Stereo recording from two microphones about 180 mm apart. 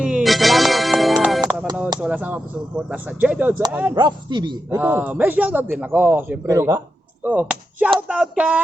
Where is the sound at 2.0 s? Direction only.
5° right (ahead or behind).